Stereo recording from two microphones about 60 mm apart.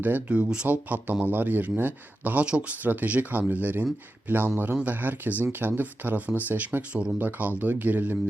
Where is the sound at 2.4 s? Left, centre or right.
Centre.